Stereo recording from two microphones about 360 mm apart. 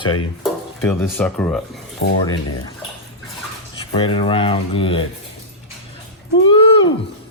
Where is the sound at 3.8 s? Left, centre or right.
Centre.